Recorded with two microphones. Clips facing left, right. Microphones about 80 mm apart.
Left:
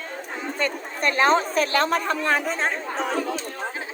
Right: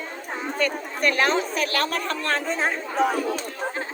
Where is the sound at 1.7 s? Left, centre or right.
Left.